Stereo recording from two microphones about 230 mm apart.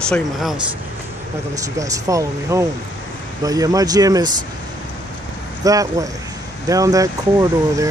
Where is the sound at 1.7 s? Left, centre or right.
Centre.